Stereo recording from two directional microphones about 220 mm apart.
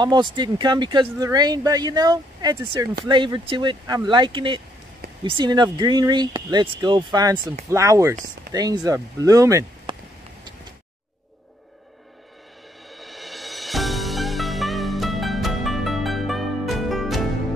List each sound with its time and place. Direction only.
0.0 s speech: 20° right (ahead or behind)
12.9 s music: centre (ahead or behind)